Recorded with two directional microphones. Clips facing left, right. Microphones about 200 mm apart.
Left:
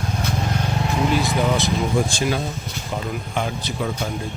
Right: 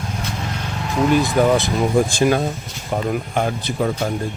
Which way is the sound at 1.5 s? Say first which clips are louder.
Right 4 dB; 55° right (ahead or behind).